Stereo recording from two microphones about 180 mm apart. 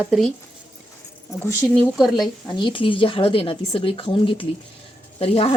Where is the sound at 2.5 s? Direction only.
25° left (ahead or behind).